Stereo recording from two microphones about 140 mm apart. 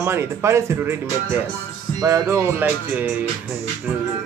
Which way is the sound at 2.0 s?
20° right (ahead or behind).